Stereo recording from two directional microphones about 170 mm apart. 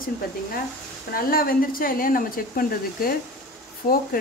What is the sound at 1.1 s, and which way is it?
Speech, 60° left (ahead or behind).